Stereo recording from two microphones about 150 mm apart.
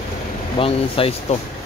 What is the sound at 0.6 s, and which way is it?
Speech, 40° left (ahead or behind).